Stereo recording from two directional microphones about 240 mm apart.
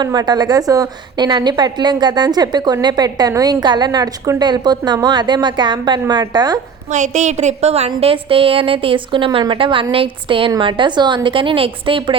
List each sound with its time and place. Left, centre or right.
0.0 s a woman's voice: centre
6.9 s a woman's voice: right